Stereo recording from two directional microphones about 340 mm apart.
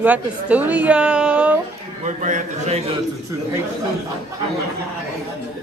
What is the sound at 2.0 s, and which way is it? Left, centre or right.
A man's voice, right.